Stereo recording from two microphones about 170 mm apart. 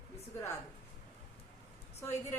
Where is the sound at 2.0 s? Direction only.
15° left (ahead or behind).